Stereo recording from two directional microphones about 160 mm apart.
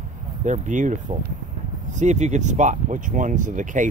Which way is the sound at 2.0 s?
45° right (ahead or behind).